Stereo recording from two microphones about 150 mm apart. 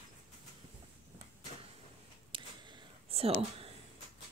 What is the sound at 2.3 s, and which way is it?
Whispering, 35° right (ahead or behind).